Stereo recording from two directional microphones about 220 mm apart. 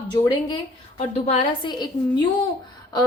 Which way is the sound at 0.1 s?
20° left (ahead or behind).